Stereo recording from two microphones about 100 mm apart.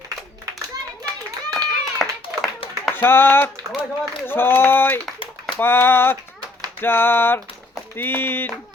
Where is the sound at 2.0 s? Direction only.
Centre (ahead or behind).